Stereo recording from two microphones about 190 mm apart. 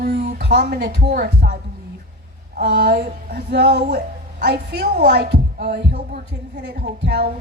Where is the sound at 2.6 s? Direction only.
55° right (ahead or behind).